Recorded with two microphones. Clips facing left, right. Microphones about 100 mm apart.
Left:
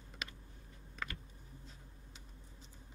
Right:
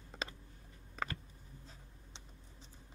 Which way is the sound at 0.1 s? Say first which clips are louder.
Right 5 dB; 30° right (ahead or behind).